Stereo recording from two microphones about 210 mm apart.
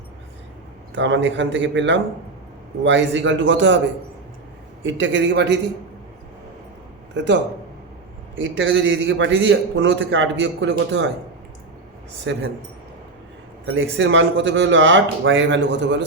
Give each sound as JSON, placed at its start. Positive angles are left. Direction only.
{"t": 0.9, "sound": "a man's voice", "side_deg": -60}
{"t": 4.8, "sound": "a man's voice", "side_deg": -60}
{"t": 7.2, "sound": "a man's voice", "side_deg": -55}
{"t": 8.4, "sound": "a man's voice", "side_deg": -65}
{"t": 12.2, "sound": "a man's voice", "side_deg": -60}
{"t": 13.9, "sound": "a man's voice", "side_deg": -65}